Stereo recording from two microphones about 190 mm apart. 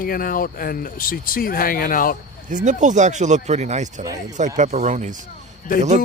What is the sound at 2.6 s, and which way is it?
Speech, 40° right (ahead or behind).